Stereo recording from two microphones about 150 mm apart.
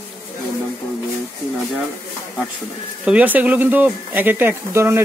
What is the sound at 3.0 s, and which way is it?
Speech, 10° right (ahead or behind).